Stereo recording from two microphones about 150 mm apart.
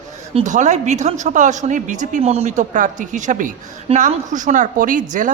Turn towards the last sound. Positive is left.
turn(degrees=-60)  # may be behind; listen again after turning